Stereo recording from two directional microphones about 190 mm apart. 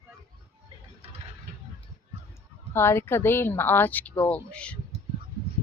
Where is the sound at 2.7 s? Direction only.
10° left (ahead or behind).